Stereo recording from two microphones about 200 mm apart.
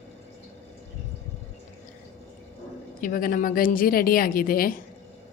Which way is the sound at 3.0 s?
45° left (ahead or behind).